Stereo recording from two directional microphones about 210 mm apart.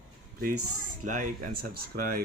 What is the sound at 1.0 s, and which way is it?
Speech, 40° right (ahead or behind).